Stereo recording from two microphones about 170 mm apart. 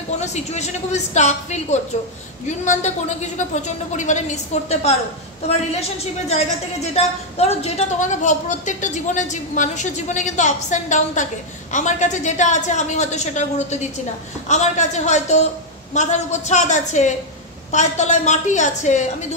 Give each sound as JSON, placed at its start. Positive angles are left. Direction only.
{"t": 0.2, "sound": "a woman's voice", "side_deg": 40}